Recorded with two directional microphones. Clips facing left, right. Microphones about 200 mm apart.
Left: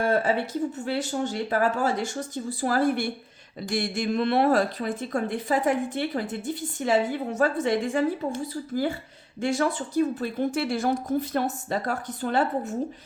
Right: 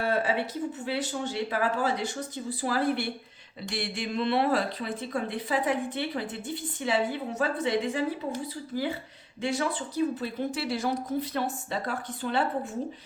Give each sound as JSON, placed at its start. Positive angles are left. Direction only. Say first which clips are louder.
{"t": 0.0, "sound": "speech", "louder": "left 4 dB", "side_deg": 45}
{"t": 9.4, "sound": "speech", "louder": "left 4 dB", "side_deg": 45}